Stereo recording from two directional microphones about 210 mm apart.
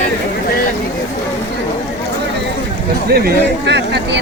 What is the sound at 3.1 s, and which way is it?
Speech, 50° right (ahead or behind).